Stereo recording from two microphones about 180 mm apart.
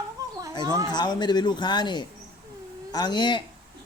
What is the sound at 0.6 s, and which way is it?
Speech, 15° right (ahead or behind).